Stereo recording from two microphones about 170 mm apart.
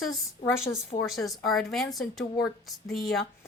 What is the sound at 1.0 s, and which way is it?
A woman's voice, centre (ahead or behind).